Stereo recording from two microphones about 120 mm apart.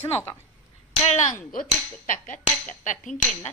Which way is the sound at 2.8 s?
90° left.